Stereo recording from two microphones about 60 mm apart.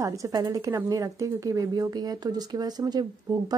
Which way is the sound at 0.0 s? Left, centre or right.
Right.